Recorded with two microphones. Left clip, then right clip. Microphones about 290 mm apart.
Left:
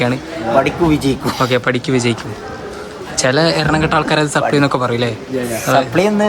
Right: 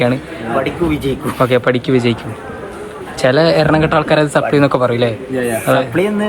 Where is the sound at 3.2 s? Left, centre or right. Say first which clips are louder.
Right 3 dB; centre.